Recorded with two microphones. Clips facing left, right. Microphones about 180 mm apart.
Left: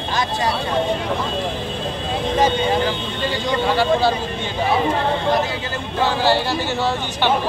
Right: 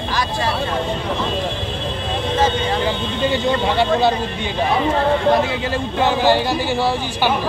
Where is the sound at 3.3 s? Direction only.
20° right (ahead or behind).